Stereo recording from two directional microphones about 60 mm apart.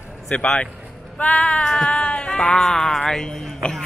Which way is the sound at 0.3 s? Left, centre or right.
Left.